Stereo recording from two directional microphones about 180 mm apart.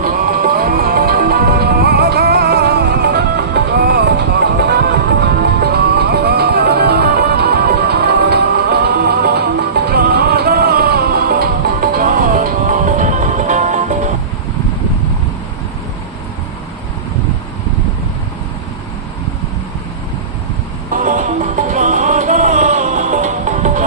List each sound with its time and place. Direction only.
0.0 s music: 50° right (ahead or behind)
20.9 s music: 45° right (ahead or behind)